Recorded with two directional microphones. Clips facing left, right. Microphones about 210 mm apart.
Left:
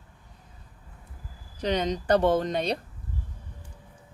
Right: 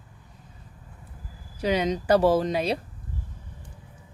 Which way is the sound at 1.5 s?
5° right (ahead or behind).